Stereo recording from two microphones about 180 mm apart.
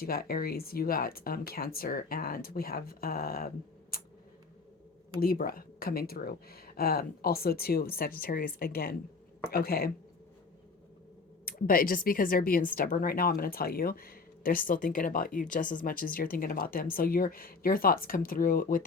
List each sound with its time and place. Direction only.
0.0 s speech: 55° left (ahead or behind)
3.9 s a sound: 55° left (ahead or behind)
5.2 s speech: 55° left (ahead or behind)
11.4 s speech: 55° left (ahead or behind)